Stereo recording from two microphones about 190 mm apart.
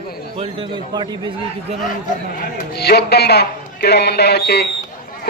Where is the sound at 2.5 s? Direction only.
60° left (ahead or behind).